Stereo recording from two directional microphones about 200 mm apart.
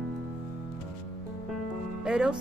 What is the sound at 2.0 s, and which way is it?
Speech, 5° right (ahead or behind).